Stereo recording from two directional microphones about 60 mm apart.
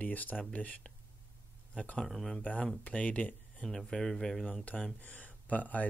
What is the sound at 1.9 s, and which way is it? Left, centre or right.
Speech, centre.